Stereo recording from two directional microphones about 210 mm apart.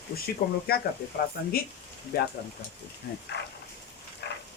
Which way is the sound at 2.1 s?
45° left (ahead or behind).